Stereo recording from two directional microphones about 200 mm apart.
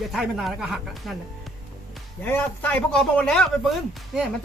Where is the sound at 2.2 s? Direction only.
10° left (ahead or behind).